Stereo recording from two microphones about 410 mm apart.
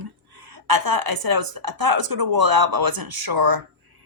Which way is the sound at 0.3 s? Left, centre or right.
Right.